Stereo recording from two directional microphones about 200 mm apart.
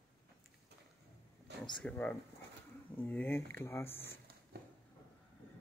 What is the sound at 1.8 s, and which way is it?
Speech, 10° left (ahead or behind).